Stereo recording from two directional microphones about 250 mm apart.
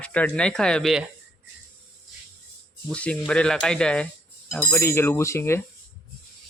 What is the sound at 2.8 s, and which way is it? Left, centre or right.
Speech, centre.